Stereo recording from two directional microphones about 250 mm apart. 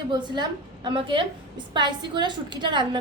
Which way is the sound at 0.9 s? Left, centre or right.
Centre.